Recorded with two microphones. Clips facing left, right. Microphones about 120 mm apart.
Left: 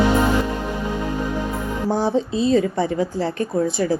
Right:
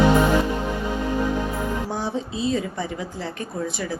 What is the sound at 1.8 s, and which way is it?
Speech, 30° left (ahead or behind).